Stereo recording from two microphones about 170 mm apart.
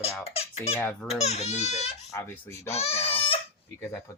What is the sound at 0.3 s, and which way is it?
Speech, 35° left (ahead or behind).